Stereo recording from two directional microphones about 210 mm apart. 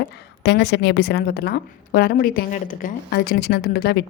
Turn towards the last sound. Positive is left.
turn(degrees=50)  # may be behind; listen again after turning